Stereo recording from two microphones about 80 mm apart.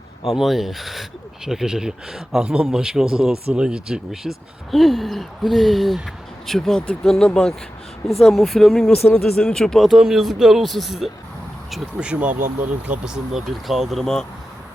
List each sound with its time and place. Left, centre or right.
0.3 s speech: centre
11.9 s speech: centre
13.1 s speech: centre